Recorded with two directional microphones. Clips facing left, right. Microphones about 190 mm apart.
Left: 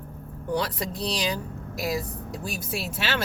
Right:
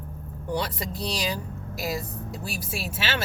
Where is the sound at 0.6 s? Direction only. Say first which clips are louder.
Left 1 dB; centre (ahead or behind).